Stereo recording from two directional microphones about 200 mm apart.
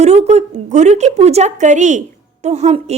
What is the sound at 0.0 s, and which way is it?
A woman's voice, 35° right (ahead or behind).